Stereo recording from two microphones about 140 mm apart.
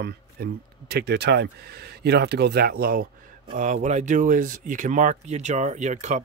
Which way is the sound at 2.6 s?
90° right.